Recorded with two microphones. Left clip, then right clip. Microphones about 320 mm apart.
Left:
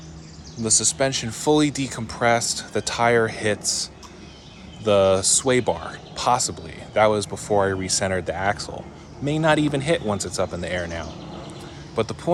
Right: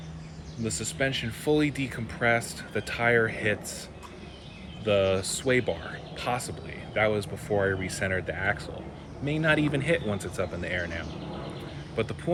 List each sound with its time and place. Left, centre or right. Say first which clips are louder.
0.7 s speech: left 8 dB; centre
4.9 s speech: left 7 dB; centre
10.8 s speech: left 3 dB; left
11.9 s speech: left 6 dB; centre